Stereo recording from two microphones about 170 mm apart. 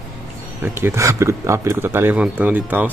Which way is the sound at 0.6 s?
15° right (ahead or behind).